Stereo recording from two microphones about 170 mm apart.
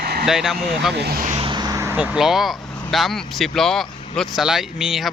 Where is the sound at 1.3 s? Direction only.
30° right (ahead or behind).